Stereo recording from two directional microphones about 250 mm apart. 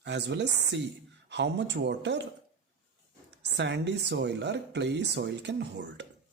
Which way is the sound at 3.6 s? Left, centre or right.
Right.